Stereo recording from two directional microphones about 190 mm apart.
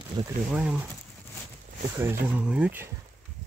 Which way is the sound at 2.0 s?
10° right (ahead or behind).